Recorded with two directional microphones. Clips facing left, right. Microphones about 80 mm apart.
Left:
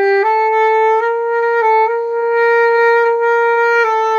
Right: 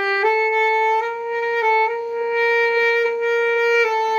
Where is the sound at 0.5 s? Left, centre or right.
Left.